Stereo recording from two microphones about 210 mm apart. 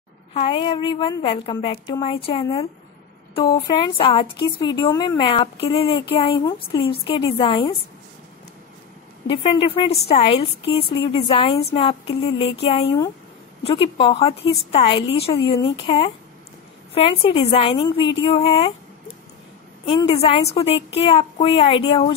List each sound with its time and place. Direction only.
0.3 s a woman's voice: 25° left (ahead or behind)
9.3 s a woman's voice: 25° left (ahead or behind)
19.9 s a woman's voice: 25° left (ahead or behind)